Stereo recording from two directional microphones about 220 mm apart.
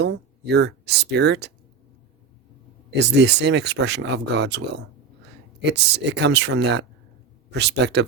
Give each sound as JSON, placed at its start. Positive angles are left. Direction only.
{"t": 0.0, "sound": "speech", "side_deg": -50}
{"t": 3.0, "sound": "speech", "side_deg": -50}
{"t": 5.6, "sound": "speech", "side_deg": -50}